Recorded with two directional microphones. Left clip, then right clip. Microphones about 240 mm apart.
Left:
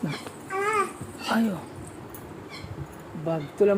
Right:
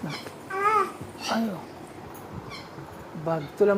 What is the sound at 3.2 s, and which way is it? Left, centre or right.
Speech, centre.